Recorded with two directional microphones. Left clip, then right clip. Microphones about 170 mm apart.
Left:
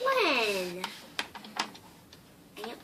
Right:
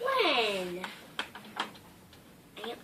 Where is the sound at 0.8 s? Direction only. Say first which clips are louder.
Left 2 dB; 30° left (ahead or behind).